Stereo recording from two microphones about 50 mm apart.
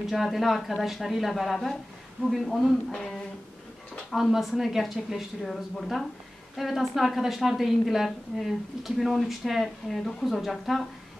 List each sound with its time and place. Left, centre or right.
0.0 s a woman's voice: centre
2.9 s humming: centre
4.1 s a woman's voice: centre